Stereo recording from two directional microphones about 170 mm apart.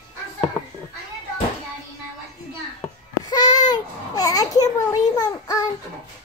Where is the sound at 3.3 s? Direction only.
25° left (ahead or behind).